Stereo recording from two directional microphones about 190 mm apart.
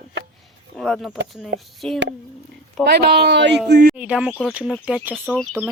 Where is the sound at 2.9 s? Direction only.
60° right (ahead or behind).